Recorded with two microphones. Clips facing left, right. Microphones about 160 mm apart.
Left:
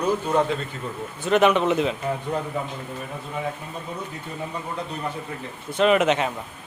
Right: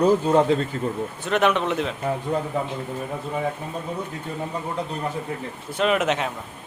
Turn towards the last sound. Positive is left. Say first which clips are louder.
# left 3 dB
turn(degrees=0)  # may be behind; listen again after turning